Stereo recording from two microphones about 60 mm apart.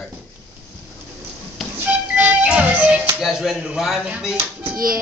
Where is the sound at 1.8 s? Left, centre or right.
Right.